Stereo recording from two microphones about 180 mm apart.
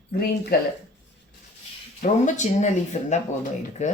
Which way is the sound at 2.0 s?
40° left (ahead or behind).